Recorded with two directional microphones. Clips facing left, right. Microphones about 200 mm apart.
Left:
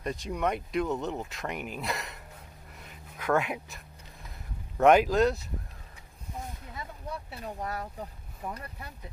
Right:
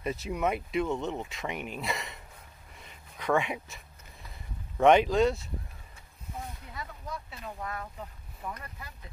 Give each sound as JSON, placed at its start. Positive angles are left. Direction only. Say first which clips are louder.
{"t": 0.0, "sound": "speech", "louder": "even", "side_deg": -5}
{"t": 6.7, "sound": "speech", "louder": "left 2 dB", "side_deg": 30}